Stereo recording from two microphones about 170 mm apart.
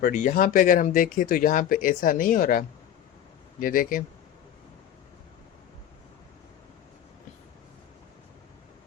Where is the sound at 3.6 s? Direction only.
55° left (ahead or behind).